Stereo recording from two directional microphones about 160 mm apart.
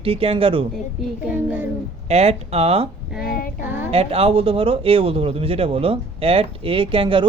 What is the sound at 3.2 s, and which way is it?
Child singing, 70° left (ahead or behind).